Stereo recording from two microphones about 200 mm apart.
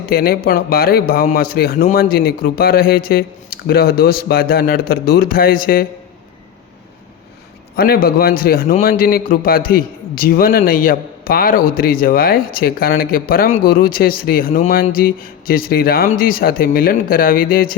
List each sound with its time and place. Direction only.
0.1 s a man's voice: 50° left (ahead or behind)
7.8 s a man's voice: 50° left (ahead or behind)